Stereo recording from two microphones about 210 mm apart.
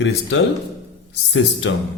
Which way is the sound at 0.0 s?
65° left (ahead or behind).